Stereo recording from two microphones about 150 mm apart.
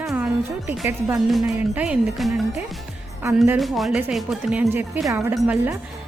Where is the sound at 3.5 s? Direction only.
Centre (ahead or behind).